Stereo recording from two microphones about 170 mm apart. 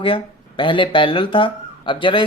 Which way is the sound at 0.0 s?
30° left (ahead or behind).